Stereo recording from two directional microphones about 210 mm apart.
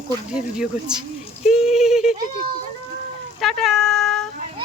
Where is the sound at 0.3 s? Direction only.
5° right (ahead or behind).